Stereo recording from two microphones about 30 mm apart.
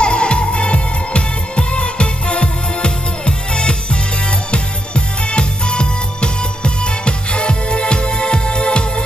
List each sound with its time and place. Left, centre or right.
0.0 s music: left